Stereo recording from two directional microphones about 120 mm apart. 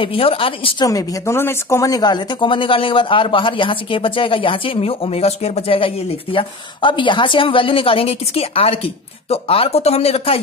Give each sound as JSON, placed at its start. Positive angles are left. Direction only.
{"t": 0.0, "sound": "speech", "side_deg": 50}
{"t": 0.8, "sound": "speech", "side_deg": 30}